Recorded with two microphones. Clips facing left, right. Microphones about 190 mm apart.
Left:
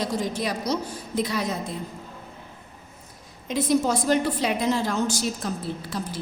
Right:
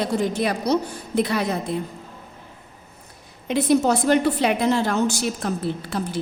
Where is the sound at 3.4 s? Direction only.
65° right (ahead or behind).